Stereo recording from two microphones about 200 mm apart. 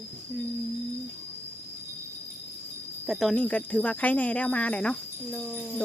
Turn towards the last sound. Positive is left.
turn(degrees=0)  # may be behind; listen again after turning